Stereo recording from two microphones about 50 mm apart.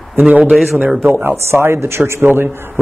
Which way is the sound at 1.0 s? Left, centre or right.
Right.